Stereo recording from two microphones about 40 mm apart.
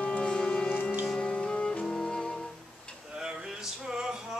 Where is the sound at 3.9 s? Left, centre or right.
Centre.